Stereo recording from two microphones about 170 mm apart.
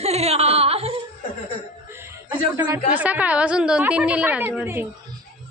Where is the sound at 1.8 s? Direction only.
15° right (ahead or behind).